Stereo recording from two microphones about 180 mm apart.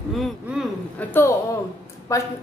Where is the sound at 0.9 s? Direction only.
10° left (ahead or behind).